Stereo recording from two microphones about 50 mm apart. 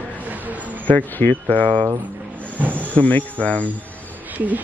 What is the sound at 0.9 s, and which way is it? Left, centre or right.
Speech, left.